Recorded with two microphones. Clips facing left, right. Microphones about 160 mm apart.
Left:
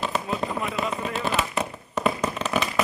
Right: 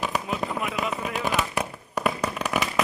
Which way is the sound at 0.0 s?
15° right (ahead or behind).